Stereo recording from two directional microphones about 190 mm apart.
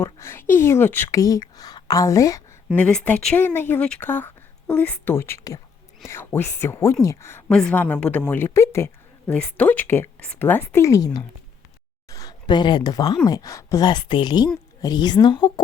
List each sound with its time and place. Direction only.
0.0 s speech: 10° left (ahead or behind)
2.7 s speech: 5° left (ahead or behind); by 15.6 s 20° left (ahead or behind)